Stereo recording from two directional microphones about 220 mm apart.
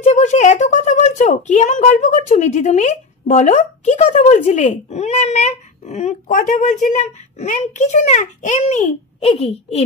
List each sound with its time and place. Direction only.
0.0 s speech: 30° left (ahead or behind)